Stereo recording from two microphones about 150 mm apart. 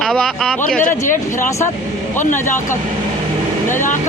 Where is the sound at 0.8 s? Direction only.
60° left (ahead or behind).